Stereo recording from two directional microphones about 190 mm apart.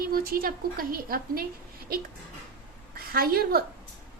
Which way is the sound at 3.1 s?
50° right (ahead or behind).